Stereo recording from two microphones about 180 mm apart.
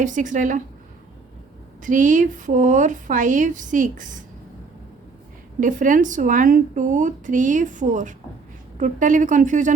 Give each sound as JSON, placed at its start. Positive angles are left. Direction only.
{"t": 0.0, "sound": "speech", "side_deg": -45}
{"t": 1.8, "sound": "speech", "side_deg": -45}
{"t": 5.5, "sound": "speech", "side_deg": -45}